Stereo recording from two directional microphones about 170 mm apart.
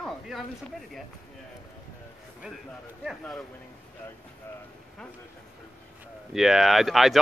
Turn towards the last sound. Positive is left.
turn(degrees=0)  # may be behind; listen again after turning